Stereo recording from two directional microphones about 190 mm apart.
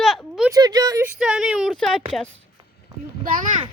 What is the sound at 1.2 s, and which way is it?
Speech, 5° right (ahead or behind).